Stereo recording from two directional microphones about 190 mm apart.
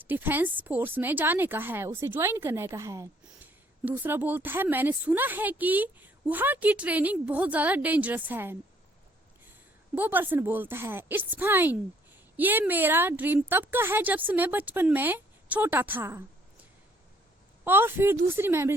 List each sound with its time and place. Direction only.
0.1 s speech: 10° right (ahead or behind)
9.9 s speech: 10° right (ahead or behind)
17.7 s speech: 10° right (ahead or behind)